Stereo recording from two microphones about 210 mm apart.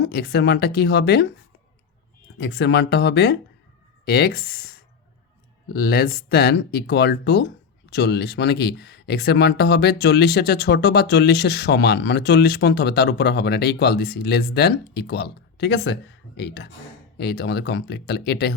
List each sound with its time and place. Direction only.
0.0 s speech: 50° left (ahead or behind)
2.4 s speech: 55° left (ahead or behind)
5.7 s speech: 50° left (ahead or behind)